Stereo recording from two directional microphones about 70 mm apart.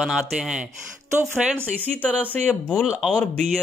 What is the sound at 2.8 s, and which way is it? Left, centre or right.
Speech, centre.